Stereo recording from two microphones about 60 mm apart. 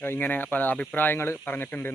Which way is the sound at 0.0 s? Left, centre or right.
Left.